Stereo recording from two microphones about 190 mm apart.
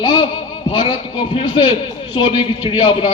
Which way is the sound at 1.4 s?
25° left (ahead or behind).